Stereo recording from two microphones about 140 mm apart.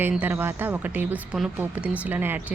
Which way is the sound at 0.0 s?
15° right (ahead or behind).